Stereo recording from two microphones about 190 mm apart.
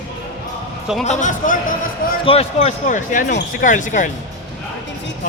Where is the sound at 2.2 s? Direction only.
30° left (ahead or behind).